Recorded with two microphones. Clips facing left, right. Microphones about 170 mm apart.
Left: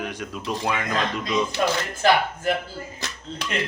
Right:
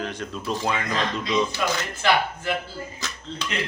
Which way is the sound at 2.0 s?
45° left (ahead or behind).